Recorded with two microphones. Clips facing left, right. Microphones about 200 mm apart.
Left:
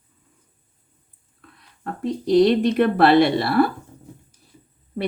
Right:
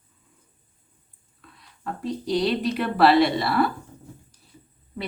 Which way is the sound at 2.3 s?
50° left (ahead or behind).